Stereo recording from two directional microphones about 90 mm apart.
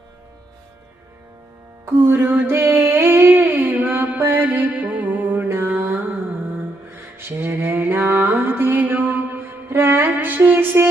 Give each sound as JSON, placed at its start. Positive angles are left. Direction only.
{"t": 2.0, "sound": "a sound", "side_deg": -25}
{"t": 6.9, "sound": "music", "side_deg": -25}
{"t": 8.9, "sound": "mantra", "side_deg": -20}